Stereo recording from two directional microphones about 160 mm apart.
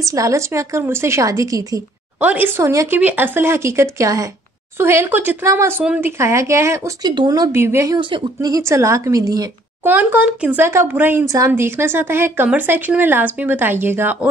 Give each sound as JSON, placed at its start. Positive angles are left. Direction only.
{"t": 0.0, "sound": "a woman's voice", "side_deg": -20}
{"t": 2.1, "sound": "a woman's voice", "side_deg": -10}
{"t": 8.0, "sound": "a woman's voice", "side_deg": -25}
{"t": 9.8, "sound": "speech", "side_deg": -10}